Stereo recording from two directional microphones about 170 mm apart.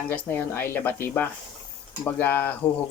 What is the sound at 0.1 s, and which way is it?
Speech, 10° left (ahead or behind).